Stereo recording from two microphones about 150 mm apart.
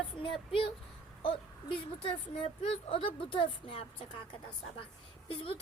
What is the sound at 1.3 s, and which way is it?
A woman's voice, 35° left (ahead or behind).